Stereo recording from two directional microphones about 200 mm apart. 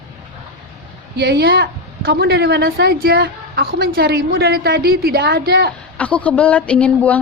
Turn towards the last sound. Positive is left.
turn(degrees=5)  # may be behind; listen again after turning